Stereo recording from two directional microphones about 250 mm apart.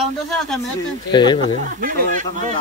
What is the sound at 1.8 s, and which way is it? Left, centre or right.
Speech, right.